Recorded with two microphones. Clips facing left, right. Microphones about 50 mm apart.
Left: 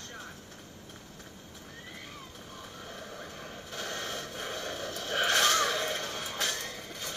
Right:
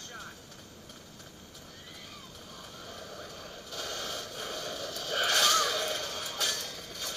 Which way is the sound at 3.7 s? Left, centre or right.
Left.